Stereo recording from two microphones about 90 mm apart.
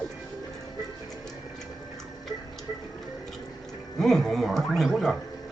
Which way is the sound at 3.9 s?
5° left (ahead or behind).